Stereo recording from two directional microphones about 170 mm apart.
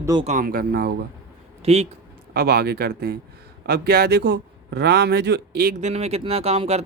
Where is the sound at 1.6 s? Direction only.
40° right (ahead or behind).